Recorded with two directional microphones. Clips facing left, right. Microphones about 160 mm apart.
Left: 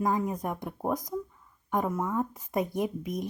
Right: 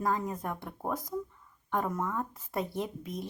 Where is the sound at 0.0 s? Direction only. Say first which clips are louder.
Left 3 dB; 15° left (ahead or behind).